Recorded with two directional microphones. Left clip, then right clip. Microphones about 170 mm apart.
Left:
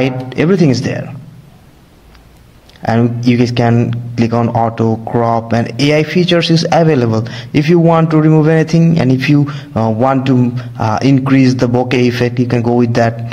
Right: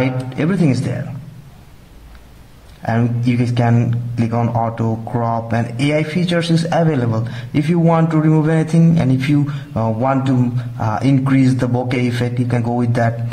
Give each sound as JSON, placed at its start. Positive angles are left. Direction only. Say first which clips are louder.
{"t": 0.0, "sound": "speech", "louder": "left 5 dB", "side_deg": 35}
{"t": 2.8, "sound": "speech", "louder": "left 6 dB", "side_deg": 35}
{"t": 10.1, "sound": "a man's voice", "louder": "left 5 dB", "side_deg": 20}
{"t": 10.5, "sound": "speech", "louder": "left 6 dB", "side_deg": 35}